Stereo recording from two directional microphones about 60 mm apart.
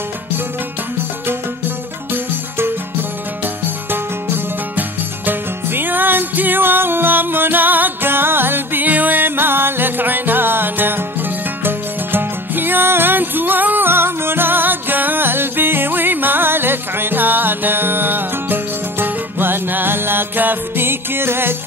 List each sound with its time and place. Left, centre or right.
3.9 s music: right